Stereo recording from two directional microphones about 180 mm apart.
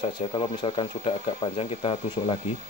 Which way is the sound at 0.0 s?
25° left (ahead or behind).